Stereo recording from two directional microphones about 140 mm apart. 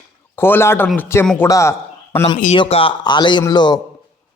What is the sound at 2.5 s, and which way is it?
Speech, 45° left (ahead or behind).